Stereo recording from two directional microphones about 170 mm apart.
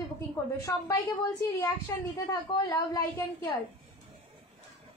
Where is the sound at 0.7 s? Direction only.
15° left (ahead or behind).